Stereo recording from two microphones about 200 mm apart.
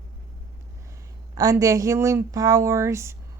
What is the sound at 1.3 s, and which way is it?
Speech, 15° right (ahead or behind).